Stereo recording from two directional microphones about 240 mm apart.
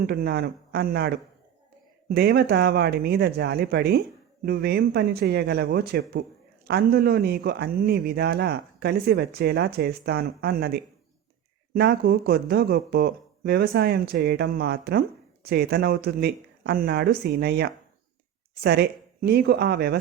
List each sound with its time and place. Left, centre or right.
0.0 s a man's voice: right